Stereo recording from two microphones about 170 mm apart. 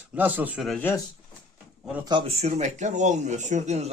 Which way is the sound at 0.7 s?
15° left (ahead or behind).